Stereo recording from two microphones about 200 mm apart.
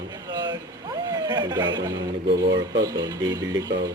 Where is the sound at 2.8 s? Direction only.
20° right (ahead or behind).